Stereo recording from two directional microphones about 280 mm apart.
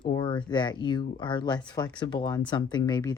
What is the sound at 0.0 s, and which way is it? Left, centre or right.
Speech, centre.